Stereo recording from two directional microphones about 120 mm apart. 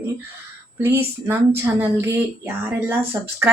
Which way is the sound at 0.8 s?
20° right (ahead or behind).